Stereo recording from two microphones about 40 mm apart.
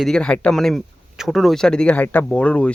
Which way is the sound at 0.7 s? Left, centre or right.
Centre.